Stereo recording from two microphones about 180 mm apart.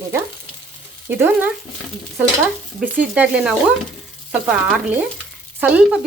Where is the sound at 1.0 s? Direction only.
10° right (ahead or behind).